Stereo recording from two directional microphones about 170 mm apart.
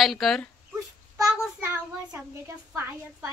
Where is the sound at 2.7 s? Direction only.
15° right (ahead or behind).